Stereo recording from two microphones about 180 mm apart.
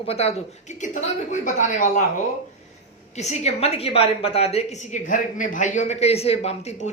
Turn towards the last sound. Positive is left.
turn(degrees=40)  # may be behind; listen again after turning